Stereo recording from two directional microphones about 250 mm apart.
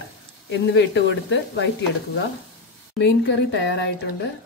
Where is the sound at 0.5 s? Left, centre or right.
Left.